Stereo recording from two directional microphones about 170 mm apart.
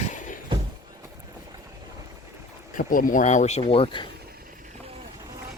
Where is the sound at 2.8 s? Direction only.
55° left (ahead or behind); by 4.0 s 30° left (ahead or behind).